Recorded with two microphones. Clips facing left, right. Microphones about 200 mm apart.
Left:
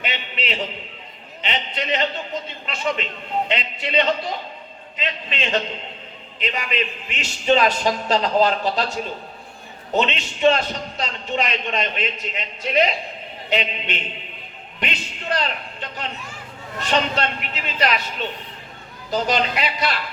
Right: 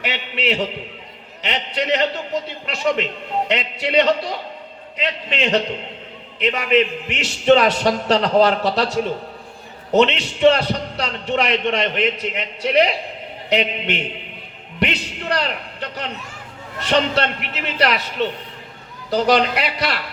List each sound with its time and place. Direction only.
0.0 s a sound: 70° right (ahead or behind)
1.4 s a man's voice: 70° right (ahead or behind)
9.9 s a man's voice: 75° right (ahead or behind)